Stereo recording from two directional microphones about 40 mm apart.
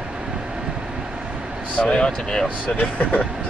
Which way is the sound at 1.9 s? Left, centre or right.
Left.